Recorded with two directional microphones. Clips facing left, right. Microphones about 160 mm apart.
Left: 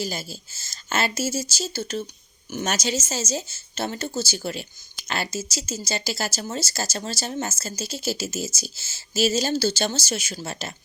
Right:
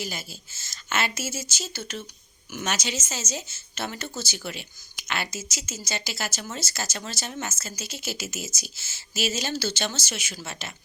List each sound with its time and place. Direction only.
0.0 s speech: 35° left (ahead or behind)